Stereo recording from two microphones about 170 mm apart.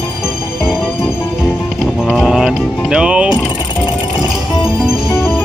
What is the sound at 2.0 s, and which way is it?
Music, centre (ahead or behind).